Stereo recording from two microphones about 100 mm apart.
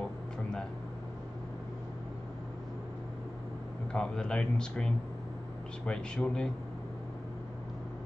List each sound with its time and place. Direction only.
3.9 s speech: 10° left (ahead or behind)